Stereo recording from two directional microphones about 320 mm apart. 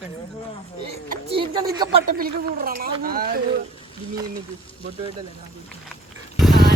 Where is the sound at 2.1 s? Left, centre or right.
Right.